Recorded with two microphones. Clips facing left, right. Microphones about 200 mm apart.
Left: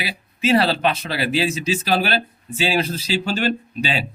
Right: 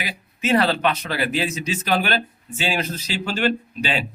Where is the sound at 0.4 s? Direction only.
30° left (ahead or behind).